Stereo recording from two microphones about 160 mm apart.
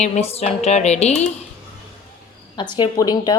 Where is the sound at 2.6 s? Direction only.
30° left (ahead or behind).